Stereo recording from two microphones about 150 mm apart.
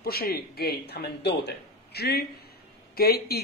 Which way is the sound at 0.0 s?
90° left.